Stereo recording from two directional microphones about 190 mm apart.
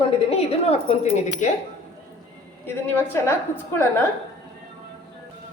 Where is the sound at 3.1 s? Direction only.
10° left (ahead or behind).